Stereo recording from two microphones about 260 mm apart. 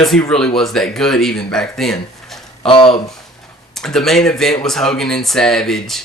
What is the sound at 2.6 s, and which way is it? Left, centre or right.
Speech, centre.